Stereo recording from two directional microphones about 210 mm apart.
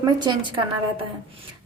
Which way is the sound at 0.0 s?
20° right (ahead or behind).